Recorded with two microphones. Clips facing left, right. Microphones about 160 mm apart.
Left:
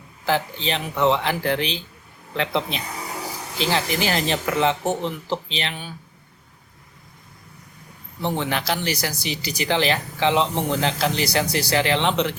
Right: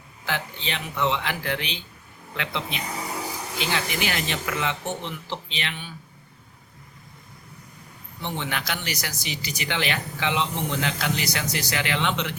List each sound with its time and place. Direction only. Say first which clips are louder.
0.3 s speech: left 7 dB; 35° left (ahead or behind)
8.2 s speech: left 6 dB; 35° left (ahead or behind)